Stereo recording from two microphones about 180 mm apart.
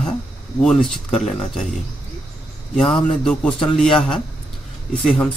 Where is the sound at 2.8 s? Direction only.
5° left (ahead or behind).